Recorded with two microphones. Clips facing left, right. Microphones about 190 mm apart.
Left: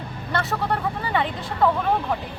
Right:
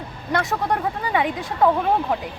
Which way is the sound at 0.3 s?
15° right (ahead or behind).